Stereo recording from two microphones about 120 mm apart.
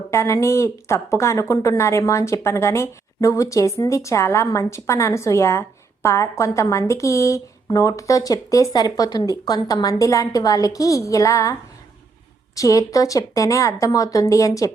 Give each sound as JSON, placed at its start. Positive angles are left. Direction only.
{"t": 0.1, "sound": "speech", "side_deg": 25}
{"t": 12.5, "sound": "speech", "side_deg": 25}